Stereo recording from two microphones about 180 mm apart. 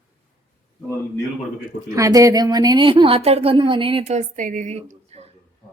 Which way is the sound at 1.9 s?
20° right (ahead or behind).